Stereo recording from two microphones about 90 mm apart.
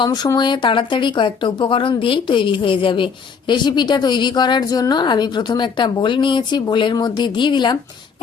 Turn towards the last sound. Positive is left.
turn(degrees=55)  # may be behind; listen again after turning